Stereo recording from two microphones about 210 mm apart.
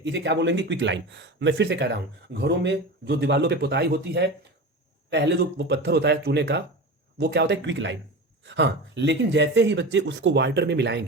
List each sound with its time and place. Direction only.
0.0 s speech: 55° right (ahead or behind)